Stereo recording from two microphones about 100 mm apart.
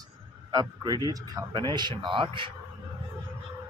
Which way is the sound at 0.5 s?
40° right (ahead or behind).